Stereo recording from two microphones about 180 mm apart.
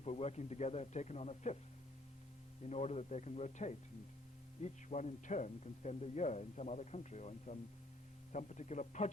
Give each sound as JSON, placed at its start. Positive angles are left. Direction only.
{"t": 0.0, "sound": "speech", "side_deg": 35}
{"t": 2.6, "sound": "speech", "side_deg": 40}